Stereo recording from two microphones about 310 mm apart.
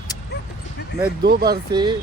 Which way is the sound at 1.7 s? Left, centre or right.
Centre.